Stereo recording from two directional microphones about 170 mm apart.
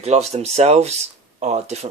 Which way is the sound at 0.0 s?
40° right (ahead or behind).